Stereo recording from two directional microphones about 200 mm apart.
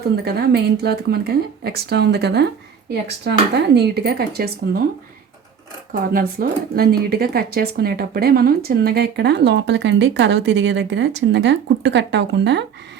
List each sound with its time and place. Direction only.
0.0 s speech: 55° right (ahead or behind)
5.9 s speech: 50° right (ahead or behind)